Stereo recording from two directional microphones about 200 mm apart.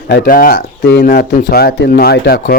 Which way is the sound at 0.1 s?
50° left (ahead or behind).